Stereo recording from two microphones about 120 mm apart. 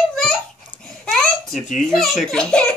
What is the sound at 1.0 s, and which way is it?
A child's voice, 5° left (ahead or behind).